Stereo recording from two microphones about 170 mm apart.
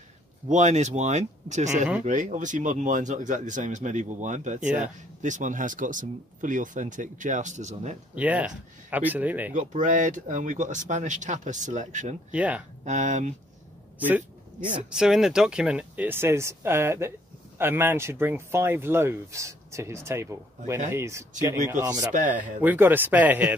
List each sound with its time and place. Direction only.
0.5 s speech: 45° right (ahead or behind)
8.1 s speech: 10° right (ahead or behind)
9.5 s speech: 45° right (ahead or behind)
12.3 s speech: 10° right (ahead or behind)
12.8 s speech: 45° right (ahead or behind)
13.9 s a sound: 10° right (ahead or behind)
14.9 s speech: 5° right (ahead or behind); by 22.1 s 20° right (ahead or behind)
22.1 s speech: 50° right (ahead or behind)
22.6 s speech: 10° right (ahead or behind)